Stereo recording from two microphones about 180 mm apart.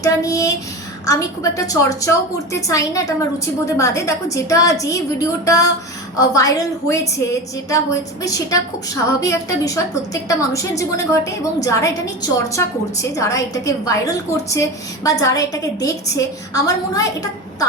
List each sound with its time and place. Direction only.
0.0 s a woman's voice: 15° left (ahead or behind)
8.2 s a woman's voice: 20° left (ahead or behind)